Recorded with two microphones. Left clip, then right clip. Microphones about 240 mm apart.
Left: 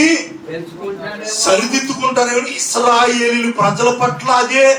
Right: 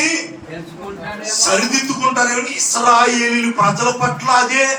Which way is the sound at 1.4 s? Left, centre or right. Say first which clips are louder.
Left 2 dB; left.